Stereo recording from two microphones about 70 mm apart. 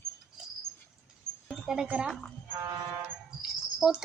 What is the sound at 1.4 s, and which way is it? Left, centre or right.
Speech, centre.